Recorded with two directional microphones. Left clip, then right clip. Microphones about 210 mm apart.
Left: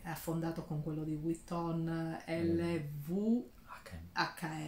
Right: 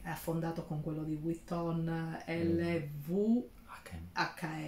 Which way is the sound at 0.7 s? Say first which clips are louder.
Right 1 dB; 10° left (ahead or behind).